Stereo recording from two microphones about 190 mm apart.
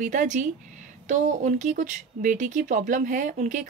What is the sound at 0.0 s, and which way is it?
Speech, 40° right (ahead or behind).